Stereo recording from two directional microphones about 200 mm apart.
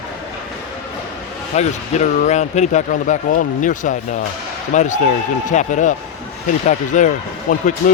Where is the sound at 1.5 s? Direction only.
35° left (ahead or behind).